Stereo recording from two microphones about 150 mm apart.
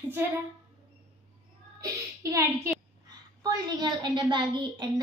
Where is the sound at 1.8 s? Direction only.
20° right (ahead or behind).